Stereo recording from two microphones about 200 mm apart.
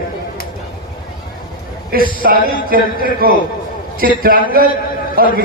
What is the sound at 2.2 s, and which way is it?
A man's voice, 45° right (ahead or behind).